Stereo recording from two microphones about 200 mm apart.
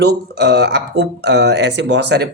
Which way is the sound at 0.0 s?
55° right (ahead or behind).